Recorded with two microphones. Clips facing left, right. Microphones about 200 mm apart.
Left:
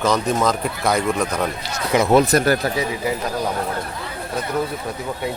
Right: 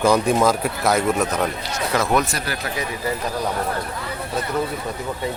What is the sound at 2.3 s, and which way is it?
Speech, 45° left (ahead or behind).